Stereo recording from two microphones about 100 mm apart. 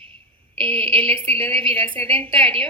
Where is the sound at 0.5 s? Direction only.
60° right (ahead or behind).